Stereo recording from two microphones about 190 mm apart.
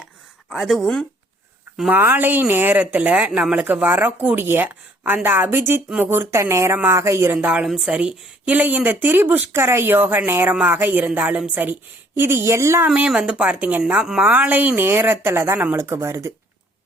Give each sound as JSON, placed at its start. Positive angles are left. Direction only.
{"t": 0.5, "sound": "speech", "side_deg": 0}